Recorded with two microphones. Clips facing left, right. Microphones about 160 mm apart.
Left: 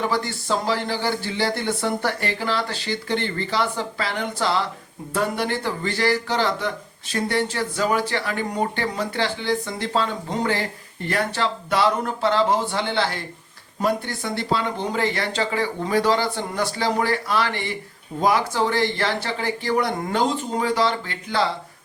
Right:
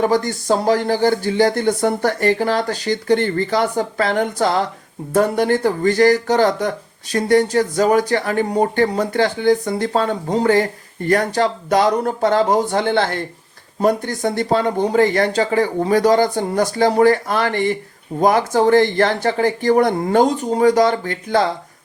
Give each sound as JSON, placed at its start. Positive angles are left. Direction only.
{"t": 0.0, "sound": "speech", "side_deg": -45}